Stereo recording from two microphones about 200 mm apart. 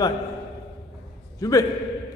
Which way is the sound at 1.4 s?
15° left (ahead or behind).